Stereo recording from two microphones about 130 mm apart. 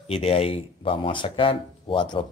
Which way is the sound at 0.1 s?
50° left (ahead or behind).